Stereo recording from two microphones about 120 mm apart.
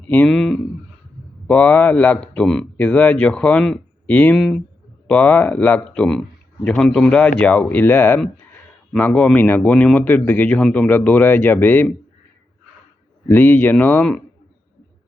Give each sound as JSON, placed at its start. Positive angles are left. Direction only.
{"t": 0.3, "sound": "speech", "side_deg": 5}
{"t": 13.2, "sound": "speech", "side_deg": 20}